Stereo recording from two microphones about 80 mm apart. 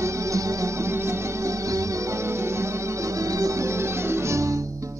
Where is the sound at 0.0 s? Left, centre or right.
Right.